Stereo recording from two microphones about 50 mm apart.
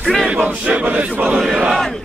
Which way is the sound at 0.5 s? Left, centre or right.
Right.